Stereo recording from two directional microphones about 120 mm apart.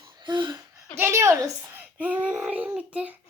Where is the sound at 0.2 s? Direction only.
40° right (ahead or behind).